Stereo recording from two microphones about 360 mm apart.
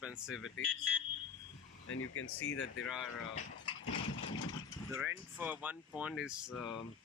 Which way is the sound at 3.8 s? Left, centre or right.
Left.